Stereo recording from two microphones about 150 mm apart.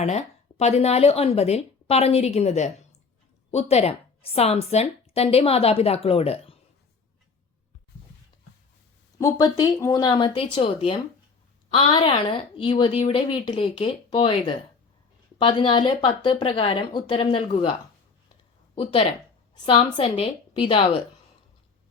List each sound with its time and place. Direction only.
0.0 s a woman's voice: 50° left (ahead or behind)
9.1 s a woman's voice: 20° left (ahead or behind); by 21.0 s 40° left (ahead or behind)